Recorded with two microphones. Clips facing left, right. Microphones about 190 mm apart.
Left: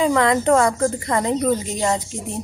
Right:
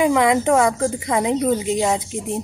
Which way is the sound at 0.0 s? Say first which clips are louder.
Right 1 dB; 15° right (ahead or behind).